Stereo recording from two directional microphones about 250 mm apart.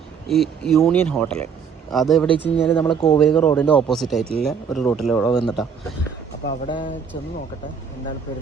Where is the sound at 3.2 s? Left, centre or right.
Centre.